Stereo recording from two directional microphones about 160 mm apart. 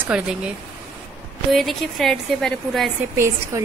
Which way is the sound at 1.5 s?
Centre (ahead or behind).